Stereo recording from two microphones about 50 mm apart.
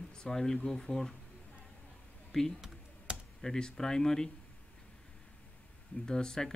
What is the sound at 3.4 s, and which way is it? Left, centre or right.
Speech, centre.